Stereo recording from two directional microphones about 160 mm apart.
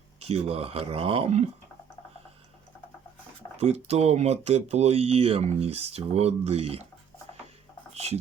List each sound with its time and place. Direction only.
0.2 s speech: 40° right (ahead or behind)
3.6 s speech: 40° right (ahead or behind)
7.9 s speech: 40° right (ahead or behind)